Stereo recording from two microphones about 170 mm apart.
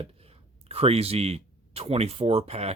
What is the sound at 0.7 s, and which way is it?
Speech, 35° right (ahead or behind).